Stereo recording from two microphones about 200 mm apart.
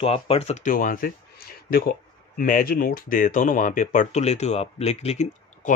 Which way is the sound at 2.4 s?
45° left (ahead or behind).